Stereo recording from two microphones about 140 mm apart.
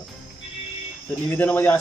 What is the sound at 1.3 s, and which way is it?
Speech, 15° left (ahead or behind).